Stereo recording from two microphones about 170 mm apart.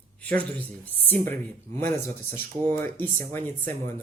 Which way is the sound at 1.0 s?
10° left (ahead or behind).